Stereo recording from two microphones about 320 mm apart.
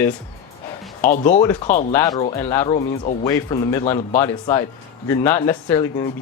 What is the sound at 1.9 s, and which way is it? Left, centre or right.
Speech, centre.